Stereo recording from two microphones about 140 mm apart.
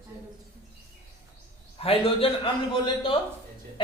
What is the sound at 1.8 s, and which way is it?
A man's voice, 45° left (ahead or behind).